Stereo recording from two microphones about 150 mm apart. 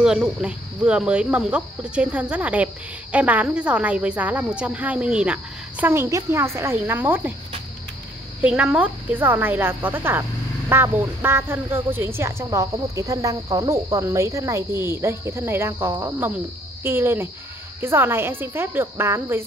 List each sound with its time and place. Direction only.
0.0 s speech: 5° right (ahead or behind)
8.4 s speech: 10° right (ahead or behind)